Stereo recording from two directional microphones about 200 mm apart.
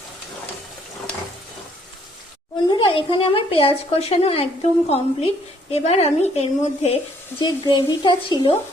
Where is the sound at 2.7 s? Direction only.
25° left (ahead or behind).